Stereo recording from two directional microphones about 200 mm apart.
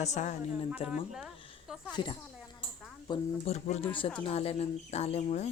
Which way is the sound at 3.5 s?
35° left (ahead or behind).